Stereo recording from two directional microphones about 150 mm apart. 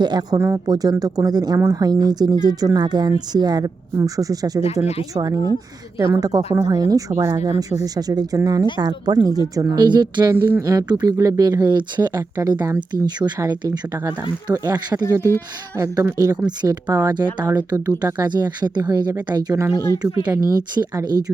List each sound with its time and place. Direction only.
0.0 s speech: 30° right (ahead or behind)
17.4 s speech: 10° right (ahead or behind)
17.7 s speech: 25° right (ahead or behind)